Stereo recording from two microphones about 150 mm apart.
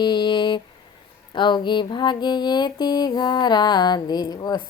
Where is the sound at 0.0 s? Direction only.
30° left (ahead or behind).